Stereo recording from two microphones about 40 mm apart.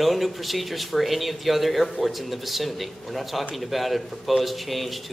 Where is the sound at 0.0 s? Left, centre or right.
Centre.